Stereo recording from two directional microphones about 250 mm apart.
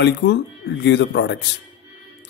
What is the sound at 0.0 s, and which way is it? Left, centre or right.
Speech, left.